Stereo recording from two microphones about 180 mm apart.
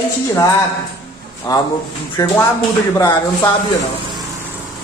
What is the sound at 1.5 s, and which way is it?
A man's voice, 20° left (ahead or behind).